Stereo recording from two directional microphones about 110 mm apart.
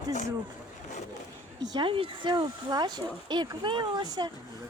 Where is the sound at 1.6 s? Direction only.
40° right (ahead or behind).